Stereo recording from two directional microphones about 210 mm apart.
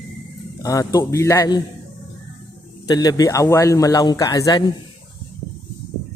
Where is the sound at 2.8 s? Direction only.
20° left (ahead or behind).